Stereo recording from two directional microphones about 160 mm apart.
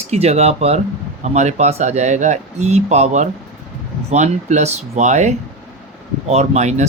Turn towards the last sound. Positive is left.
turn(degrees=-45)  # may be behind; listen again after turning